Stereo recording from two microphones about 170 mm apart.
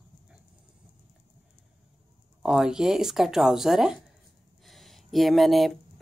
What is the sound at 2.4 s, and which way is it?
Speech, 5° right (ahead or behind).